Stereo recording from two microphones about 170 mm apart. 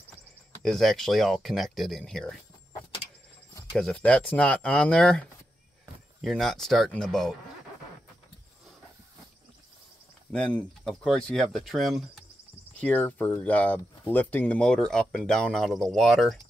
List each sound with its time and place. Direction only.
0.6 s speech: centre (ahead or behind)
3.7 s speech: 5° left (ahead or behind)
6.2 s speech: centre (ahead or behind)
10.3 s speech: 5° left (ahead or behind)
12.8 s speech: 10° left (ahead or behind)